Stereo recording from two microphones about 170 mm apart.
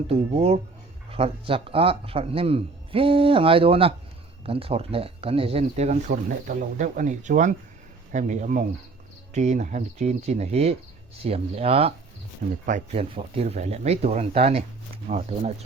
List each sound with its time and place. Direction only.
0.1 s a man's voice: 35° right (ahead or behind)
6.1 s a man's voice: 55° right (ahead or behind)